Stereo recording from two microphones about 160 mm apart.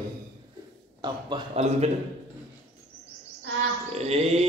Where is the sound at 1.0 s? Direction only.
25° right (ahead or behind).